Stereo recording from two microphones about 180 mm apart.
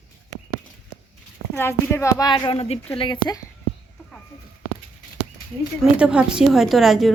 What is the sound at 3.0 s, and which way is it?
Speech, 25° left (ahead or behind).